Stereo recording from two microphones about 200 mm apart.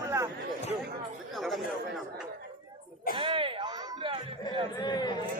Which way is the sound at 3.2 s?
25° right (ahead or behind).